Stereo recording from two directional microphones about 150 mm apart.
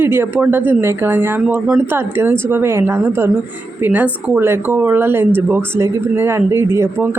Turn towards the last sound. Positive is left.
turn(degrees=-15)  # may be behind; listen again after turning